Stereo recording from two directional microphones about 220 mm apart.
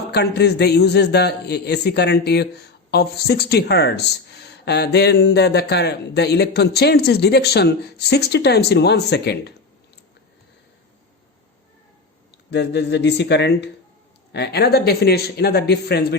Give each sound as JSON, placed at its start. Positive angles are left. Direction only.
{"t": 0.1, "sound": "a man's voice", "side_deg": 50}
{"t": 12.5, "sound": "a man's voice", "side_deg": 50}